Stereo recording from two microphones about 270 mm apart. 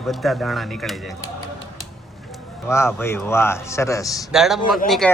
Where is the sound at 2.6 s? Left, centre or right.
Centre.